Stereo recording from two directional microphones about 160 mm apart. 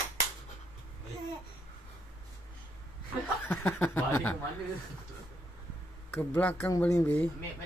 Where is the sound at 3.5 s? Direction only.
10° left (ahead or behind).